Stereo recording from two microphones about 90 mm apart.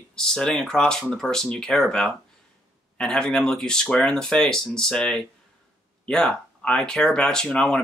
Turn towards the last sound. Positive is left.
turn(degrees=5)  # may be behind; listen again after turning